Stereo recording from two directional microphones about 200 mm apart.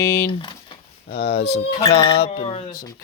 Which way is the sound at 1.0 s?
55° left (ahead or behind).